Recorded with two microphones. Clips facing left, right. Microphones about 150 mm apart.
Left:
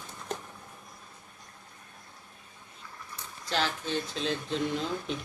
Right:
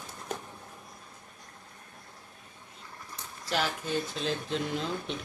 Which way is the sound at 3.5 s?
5° right (ahead or behind).